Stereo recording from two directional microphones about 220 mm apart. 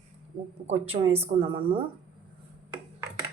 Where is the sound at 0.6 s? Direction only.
30° right (ahead or behind).